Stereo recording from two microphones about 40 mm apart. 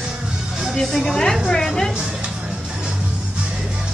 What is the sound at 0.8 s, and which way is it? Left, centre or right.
Speech, centre.